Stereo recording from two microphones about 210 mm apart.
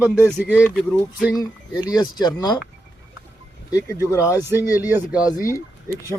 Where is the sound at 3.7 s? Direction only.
15° left (ahead or behind).